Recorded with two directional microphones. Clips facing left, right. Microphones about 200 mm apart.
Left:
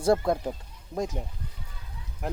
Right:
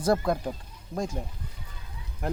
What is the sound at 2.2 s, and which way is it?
Speech, centre (ahead or behind).